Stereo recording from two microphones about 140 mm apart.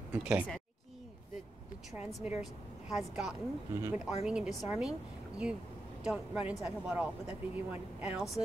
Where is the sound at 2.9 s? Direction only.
5° right (ahead or behind).